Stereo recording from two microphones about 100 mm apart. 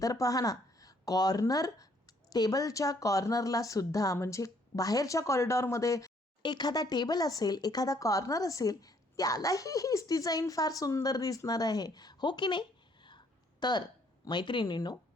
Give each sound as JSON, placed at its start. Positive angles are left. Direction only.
{"t": 0.0, "sound": "speech", "side_deg": 35}
{"t": 6.4, "sound": "speech", "side_deg": 45}